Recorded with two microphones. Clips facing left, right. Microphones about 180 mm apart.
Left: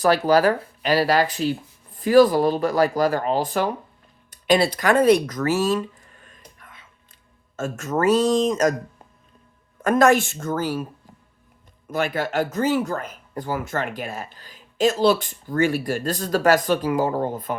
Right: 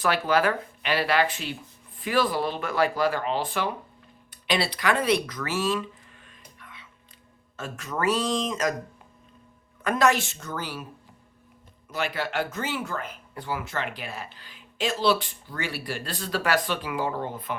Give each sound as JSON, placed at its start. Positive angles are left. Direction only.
{"t": 0.0, "sound": "speech", "side_deg": 40}
{"t": 4.3, "sound": "a sound", "side_deg": 45}
{"t": 7.5, "sound": "speech", "side_deg": 45}
{"t": 9.8, "sound": "speech", "side_deg": 50}
{"t": 11.9, "sound": "speech", "side_deg": 50}